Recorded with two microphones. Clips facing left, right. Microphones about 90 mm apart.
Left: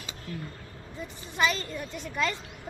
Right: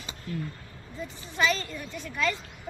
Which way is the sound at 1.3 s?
15° left (ahead or behind).